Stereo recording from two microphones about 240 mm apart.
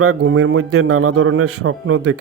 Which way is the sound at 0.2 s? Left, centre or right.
Right.